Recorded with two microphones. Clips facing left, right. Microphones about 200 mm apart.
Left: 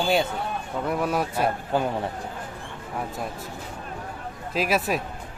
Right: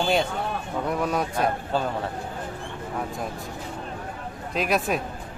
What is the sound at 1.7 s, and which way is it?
Speech, 15° left (ahead or behind).